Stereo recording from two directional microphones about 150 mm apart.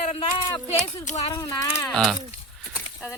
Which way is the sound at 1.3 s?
20° left (ahead or behind).